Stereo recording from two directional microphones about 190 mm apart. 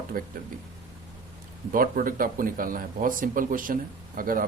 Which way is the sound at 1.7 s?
45° right (ahead or behind).